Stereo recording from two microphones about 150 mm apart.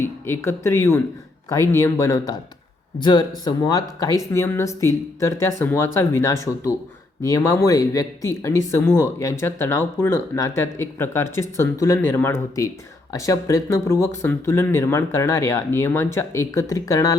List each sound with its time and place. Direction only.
0.0 s speech: 15° left (ahead or behind)